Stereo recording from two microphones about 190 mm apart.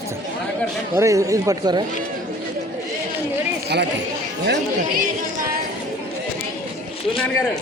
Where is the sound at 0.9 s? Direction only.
15° right (ahead or behind).